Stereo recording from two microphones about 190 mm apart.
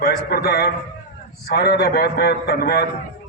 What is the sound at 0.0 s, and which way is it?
A man's voice, 55° left (ahead or behind).